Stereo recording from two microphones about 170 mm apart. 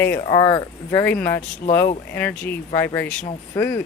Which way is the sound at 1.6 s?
40° left (ahead or behind).